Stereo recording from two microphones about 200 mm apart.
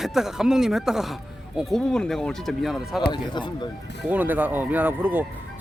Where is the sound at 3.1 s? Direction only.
20° left (ahead or behind).